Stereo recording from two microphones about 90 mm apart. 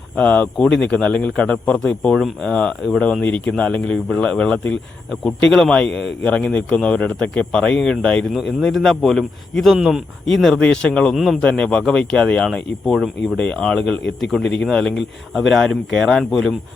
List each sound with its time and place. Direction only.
0.3 s a man's voice: 10° left (ahead or behind)
11.1 s a man's voice: centre (ahead or behind)
11.4 s a man's voice: 10° left (ahead or behind)